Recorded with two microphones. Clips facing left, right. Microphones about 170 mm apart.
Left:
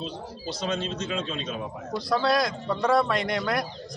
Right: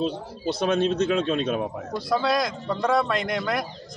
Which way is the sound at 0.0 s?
60° right (ahead or behind).